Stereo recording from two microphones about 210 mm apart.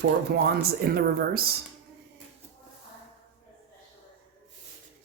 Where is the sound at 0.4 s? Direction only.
50° right (ahead or behind).